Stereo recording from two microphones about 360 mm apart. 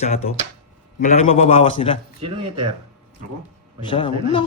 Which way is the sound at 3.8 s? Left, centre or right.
Centre.